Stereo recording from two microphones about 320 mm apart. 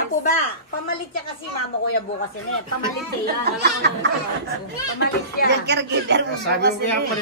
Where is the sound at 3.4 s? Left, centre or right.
Right.